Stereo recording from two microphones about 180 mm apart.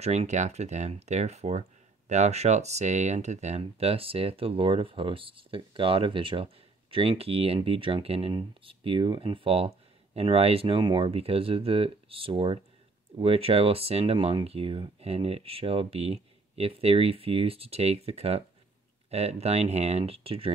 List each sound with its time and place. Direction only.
0.0 s speech: 40° right (ahead or behind)